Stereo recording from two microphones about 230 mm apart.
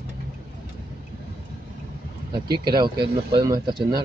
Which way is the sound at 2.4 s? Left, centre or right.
Right.